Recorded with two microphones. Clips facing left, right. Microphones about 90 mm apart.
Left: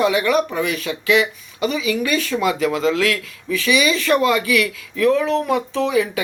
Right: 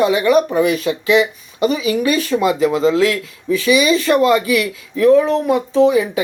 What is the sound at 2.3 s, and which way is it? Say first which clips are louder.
Speech: right 4 dB; 30° right (ahead or behind).